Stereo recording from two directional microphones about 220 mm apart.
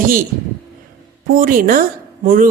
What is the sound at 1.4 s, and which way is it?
Speech, 40° right (ahead or behind).